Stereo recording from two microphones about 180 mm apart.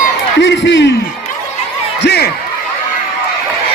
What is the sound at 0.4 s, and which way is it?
Speech, 85° left.